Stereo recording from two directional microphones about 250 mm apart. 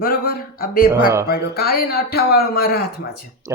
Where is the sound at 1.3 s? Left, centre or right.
Left.